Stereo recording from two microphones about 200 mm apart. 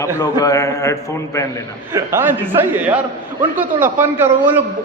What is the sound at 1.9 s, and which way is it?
A man's voice, 10° right (ahead or behind).